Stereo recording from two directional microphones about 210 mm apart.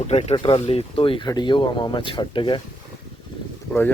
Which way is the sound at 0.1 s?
30° left (ahead or behind).